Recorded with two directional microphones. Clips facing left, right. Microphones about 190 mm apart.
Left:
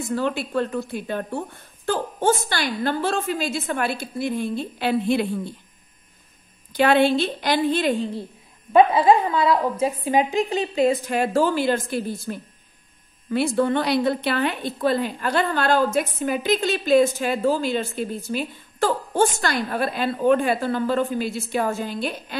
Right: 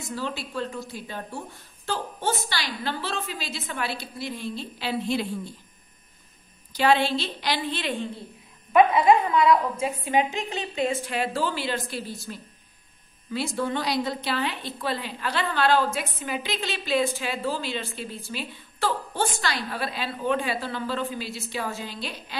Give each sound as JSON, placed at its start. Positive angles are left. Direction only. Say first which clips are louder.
{"t": 0.1, "sound": "a woman's voice", "louder": "left 8 dB", "side_deg": 55}
{"t": 6.7, "sound": "a woman's voice", "louder": "left 5 dB", "side_deg": 55}